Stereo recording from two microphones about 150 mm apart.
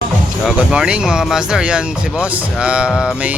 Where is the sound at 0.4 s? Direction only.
5° right (ahead or behind).